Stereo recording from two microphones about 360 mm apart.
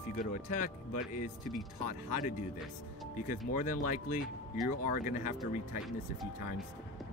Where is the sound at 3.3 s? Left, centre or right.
Left.